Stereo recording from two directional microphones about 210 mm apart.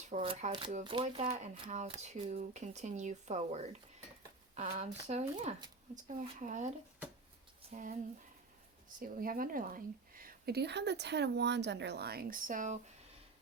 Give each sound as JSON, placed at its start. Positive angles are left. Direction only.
{"t": 0.1, "sound": "speech", "side_deg": -30}
{"t": 5.5, "sound": "speech", "side_deg": -20}
{"t": 6.1, "sound": "speech", "side_deg": -35}
{"t": 7.7, "sound": "speech", "side_deg": -40}
{"t": 9.0, "sound": "a woman's voice", "side_deg": -40}